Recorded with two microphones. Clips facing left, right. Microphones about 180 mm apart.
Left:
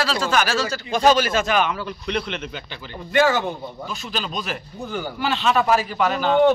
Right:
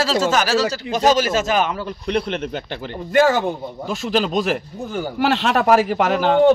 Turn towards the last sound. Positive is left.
turn(degrees=-80)